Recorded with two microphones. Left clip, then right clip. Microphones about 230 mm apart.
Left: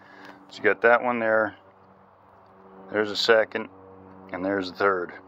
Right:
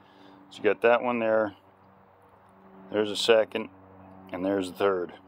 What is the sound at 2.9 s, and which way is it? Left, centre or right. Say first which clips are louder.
Speech: left 2 dB; centre.